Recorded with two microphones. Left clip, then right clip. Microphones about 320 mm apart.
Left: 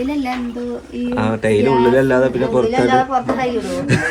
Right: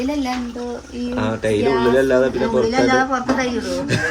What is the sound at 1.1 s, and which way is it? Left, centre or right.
A man's voice, left.